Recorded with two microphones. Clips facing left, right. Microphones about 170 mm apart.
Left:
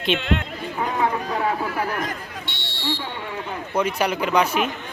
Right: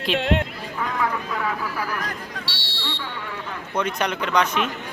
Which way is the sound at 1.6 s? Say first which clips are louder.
Left 3 dB; 45° left (ahead or behind).